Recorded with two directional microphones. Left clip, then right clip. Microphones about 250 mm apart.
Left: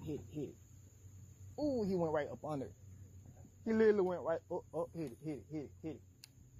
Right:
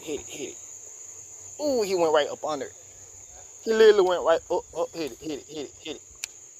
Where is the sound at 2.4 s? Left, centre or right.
Centre.